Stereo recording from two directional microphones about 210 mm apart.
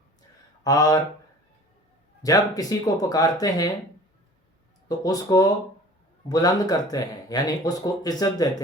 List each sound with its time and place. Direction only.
0.6 s speech: 15° left (ahead or behind)
2.2 s speech: 15° left (ahead or behind)
4.9 s speech: 15° left (ahead or behind)